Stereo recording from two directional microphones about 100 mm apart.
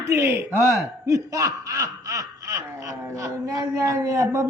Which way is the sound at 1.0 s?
35° right (ahead or behind).